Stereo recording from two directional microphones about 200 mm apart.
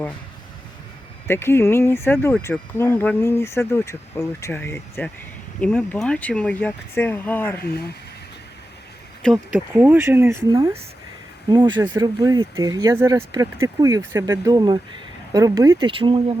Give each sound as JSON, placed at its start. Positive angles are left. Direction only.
{"t": 1.3, "sound": "speech", "side_deg": 10}
{"t": 9.2, "sound": "speech", "side_deg": 0}